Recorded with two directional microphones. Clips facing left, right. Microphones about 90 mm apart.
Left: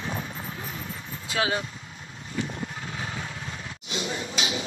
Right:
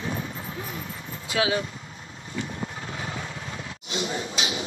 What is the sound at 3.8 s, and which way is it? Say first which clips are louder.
Speech: right 2 dB; 35° right (ahead or behind).